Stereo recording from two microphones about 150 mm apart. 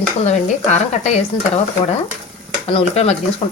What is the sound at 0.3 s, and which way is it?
Speech, 50° left (ahead or behind).